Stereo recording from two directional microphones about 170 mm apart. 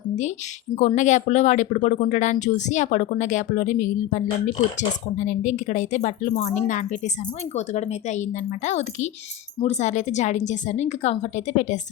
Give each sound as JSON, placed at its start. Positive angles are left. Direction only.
{"t": 0.9, "sound": "speech", "side_deg": 45}